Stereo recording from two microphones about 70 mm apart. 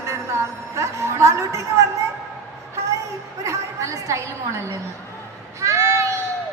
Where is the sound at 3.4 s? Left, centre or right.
Right.